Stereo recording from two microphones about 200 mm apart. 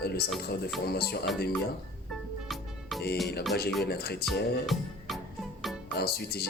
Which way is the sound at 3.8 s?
55° left (ahead or behind).